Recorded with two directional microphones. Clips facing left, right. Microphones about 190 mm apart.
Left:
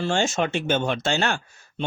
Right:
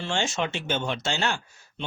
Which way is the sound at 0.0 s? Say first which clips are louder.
Left 5 dB; 45° left (ahead or behind).